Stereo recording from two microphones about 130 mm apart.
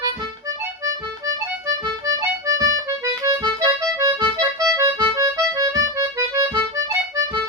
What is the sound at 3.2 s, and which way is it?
Accordion, 30° right (ahead or behind).